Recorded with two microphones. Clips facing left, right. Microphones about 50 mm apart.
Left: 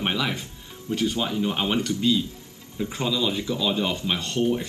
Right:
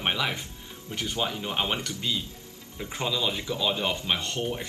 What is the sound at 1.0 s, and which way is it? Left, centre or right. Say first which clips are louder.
Speech: left 4 dB; right.